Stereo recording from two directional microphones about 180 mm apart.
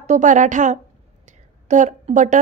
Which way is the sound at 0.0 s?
45° right (ahead or behind).